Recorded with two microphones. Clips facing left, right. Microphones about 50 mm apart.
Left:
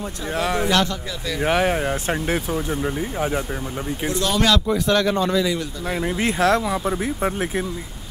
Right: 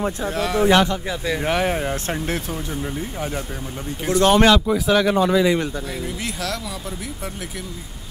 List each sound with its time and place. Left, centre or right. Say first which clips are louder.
0.3 s speech: even; centre
0.7 s speech: right 4 dB; right
1.4 s speech: left 4 dB; centre
4.1 s speech: right 6 dB; right
4.6 s speech: right 1 dB; centre
6.0 s speech: left 8 dB; left